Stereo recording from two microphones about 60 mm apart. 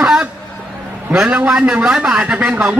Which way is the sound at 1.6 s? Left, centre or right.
Centre.